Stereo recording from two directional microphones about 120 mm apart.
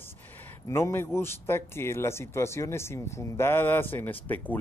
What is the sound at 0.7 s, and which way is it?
Speech, 20° left (ahead or behind).